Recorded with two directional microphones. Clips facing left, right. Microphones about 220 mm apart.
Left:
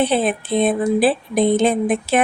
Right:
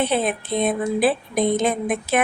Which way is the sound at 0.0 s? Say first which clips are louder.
Left 3 dB; 30° left (ahead or behind).